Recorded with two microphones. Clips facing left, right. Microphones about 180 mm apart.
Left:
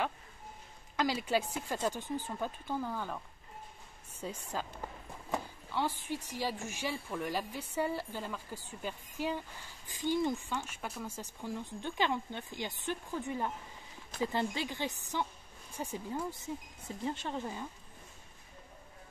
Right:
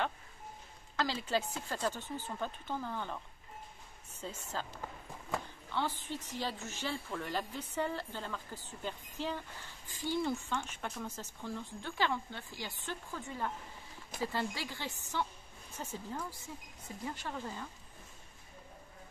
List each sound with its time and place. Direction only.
0.9 s speech: 10° left (ahead or behind)
4.2 s speech: 10° left (ahead or behind)